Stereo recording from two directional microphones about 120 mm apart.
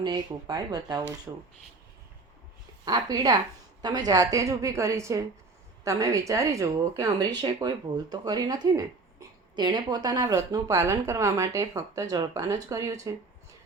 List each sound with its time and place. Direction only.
0.0 s speech: 35° right (ahead or behind)
2.8 s speech: 35° right (ahead or behind)